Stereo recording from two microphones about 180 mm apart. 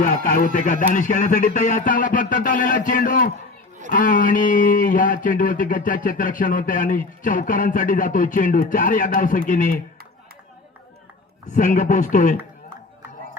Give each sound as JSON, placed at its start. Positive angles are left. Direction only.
{"t": 0.0, "sound": "speech", "side_deg": 50}
{"t": 11.5, "sound": "speech", "side_deg": 45}